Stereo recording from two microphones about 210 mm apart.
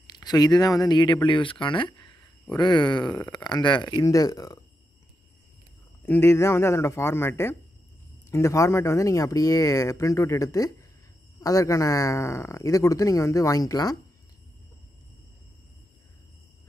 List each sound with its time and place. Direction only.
0.0 s speech: 20° left (ahead or behind)
6.0 s speech: 10° left (ahead or behind)